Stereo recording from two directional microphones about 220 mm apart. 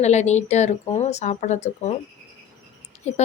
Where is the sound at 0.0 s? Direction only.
30° left (ahead or behind).